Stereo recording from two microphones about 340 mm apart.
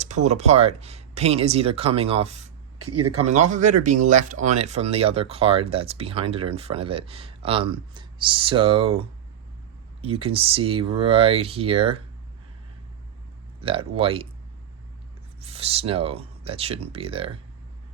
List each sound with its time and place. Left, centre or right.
0.0 s speech: centre
2.8 s speech: right
3.2 s speech: centre
13.6 s speech: centre
15.4 s speech: centre